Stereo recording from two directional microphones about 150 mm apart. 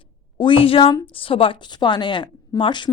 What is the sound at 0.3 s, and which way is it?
A woman's voice, 35° left (ahead or behind).